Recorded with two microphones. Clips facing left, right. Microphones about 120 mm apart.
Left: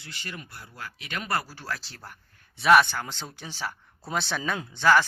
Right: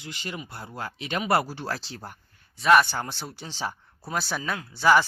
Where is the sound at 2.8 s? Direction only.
15° right (ahead or behind).